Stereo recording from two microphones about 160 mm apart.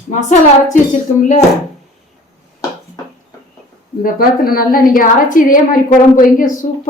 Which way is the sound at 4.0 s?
65° left (ahead or behind).